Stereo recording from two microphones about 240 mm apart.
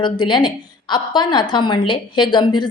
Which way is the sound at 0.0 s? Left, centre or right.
Centre.